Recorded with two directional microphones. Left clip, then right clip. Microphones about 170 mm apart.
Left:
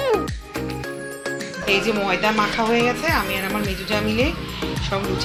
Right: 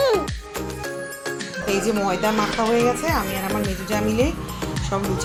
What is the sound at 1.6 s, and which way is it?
Speech, 5° right (ahead or behind).